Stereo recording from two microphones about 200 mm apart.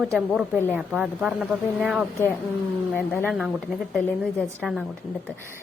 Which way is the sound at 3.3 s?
5° right (ahead or behind).